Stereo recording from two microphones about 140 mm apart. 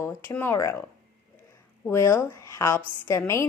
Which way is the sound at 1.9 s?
20° left (ahead or behind).